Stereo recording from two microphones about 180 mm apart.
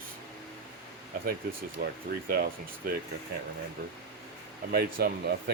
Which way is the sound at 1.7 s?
55° right (ahead or behind).